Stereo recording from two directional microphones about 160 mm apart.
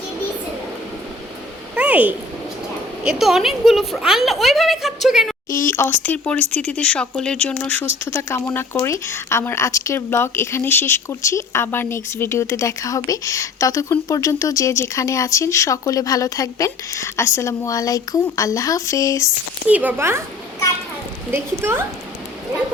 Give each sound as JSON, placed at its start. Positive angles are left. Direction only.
{"t": 1.7, "sound": "a sound", "side_deg": -10}
{"t": 3.0, "sound": "a woman's voice", "side_deg": -5}
{"t": 5.5, "sound": "speech", "side_deg": 20}
{"t": 19.6, "sound": "speech", "side_deg": -10}
{"t": 21.2, "sound": "speech", "side_deg": -15}